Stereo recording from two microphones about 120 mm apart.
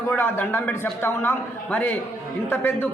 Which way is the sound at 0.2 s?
15° left (ahead or behind).